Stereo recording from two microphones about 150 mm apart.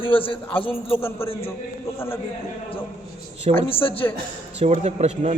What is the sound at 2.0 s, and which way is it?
Speech, 15° left (ahead or behind).